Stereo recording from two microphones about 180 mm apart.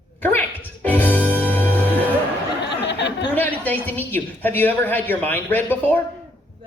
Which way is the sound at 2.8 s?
75° left (ahead or behind).